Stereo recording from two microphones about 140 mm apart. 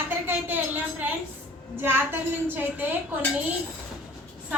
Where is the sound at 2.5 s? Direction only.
15° right (ahead or behind).